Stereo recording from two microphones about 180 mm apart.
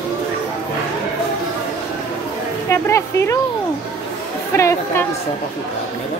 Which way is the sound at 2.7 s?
15° left (ahead or behind).